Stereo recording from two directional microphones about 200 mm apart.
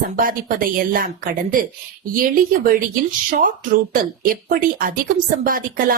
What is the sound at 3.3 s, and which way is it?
Speech, 45° right (ahead or behind).